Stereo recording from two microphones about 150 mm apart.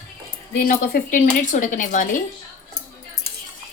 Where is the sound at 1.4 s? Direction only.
55° left (ahead or behind).